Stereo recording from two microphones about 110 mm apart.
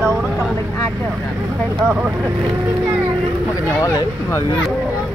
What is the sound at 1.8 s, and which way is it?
Speech, 15° right (ahead or behind).